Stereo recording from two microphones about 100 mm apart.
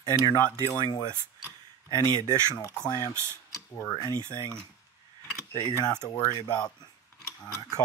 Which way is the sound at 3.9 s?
40° left (ahead or behind).